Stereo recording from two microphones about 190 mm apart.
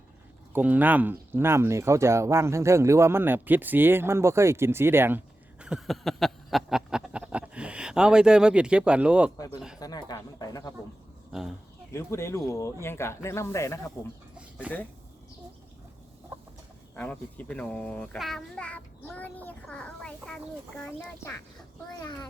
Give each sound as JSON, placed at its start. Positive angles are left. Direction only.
{"t": 0.5, "sound": "speech", "side_deg": -10}
{"t": 9.8, "sound": "speech", "side_deg": 20}
{"t": 11.3, "sound": "speech", "side_deg": -5}
{"t": 11.9, "sound": "speech", "side_deg": 15}
{"t": 16.9, "sound": "a child's voice", "side_deg": 10}